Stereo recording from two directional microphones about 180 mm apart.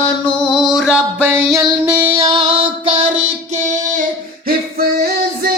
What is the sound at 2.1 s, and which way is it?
Music, 30° right (ahead or behind).